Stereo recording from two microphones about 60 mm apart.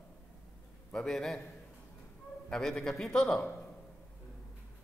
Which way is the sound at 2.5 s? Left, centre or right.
Centre.